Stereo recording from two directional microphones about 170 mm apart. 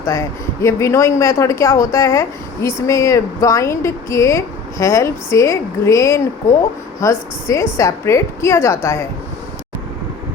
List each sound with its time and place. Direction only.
0.0 s speech: 20° left (ahead or behind)